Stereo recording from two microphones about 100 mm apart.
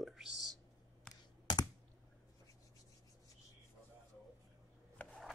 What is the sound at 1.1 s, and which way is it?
Computer keyboard, 10° left (ahead or behind).